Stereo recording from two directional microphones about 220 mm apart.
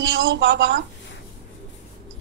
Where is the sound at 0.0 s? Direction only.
60° right (ahead or behind).